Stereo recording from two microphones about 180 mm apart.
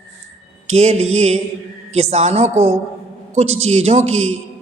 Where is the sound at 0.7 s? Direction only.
40° right (ahead or behind).